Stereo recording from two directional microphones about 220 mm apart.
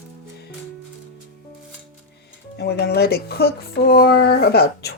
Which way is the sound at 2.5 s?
45° left (ahead or behind).